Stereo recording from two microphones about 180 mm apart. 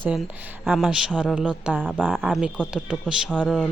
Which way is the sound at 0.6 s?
Centre (ahead or behind).